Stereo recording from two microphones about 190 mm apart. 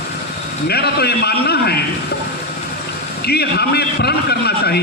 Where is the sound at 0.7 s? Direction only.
55° left (ahead or behind).